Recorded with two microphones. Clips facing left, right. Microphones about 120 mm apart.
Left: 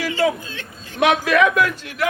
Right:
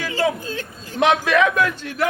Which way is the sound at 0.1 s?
35° right (ahead or behind).